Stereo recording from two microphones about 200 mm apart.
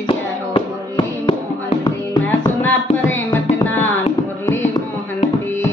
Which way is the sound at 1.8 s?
10° left (ahead or behind).